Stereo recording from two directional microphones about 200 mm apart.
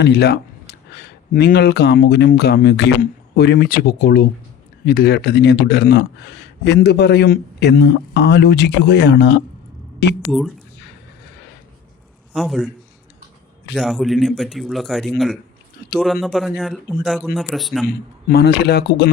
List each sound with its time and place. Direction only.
0.0 s a man's voice: 55° left (ahead or behind)
12.3 s a man's voice: centre (ahead or behind)
13.7 s a man's voice: centre (ahead or behind)
17.8 s speech: 50° left (ahead or behind)